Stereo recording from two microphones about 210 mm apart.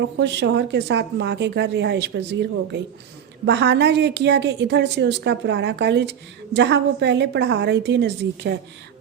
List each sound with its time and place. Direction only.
0.0 s speech: 55° right (ahead or behind)
3.4 s a woman's voice: 55° right (ahead or behind)